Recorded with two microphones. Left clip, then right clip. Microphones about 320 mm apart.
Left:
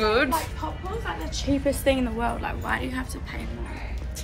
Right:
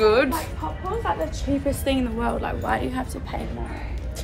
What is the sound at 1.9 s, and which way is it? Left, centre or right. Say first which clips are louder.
Speech: left 2 dB; centre.